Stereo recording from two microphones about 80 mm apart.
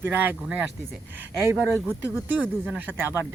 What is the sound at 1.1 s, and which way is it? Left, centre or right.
Speech, right.